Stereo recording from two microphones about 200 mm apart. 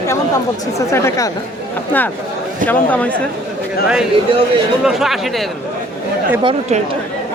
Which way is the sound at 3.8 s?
5° right (ahead or behind).